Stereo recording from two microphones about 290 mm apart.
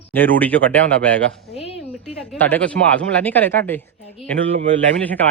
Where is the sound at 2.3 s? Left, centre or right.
Centre.